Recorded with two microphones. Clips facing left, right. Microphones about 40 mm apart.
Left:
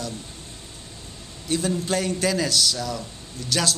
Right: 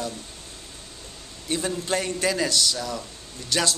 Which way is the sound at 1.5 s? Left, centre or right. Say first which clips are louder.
Left 2 dB; centre.